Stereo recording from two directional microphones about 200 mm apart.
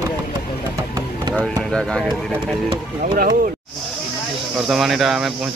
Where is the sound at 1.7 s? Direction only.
5° left (ahead or behind).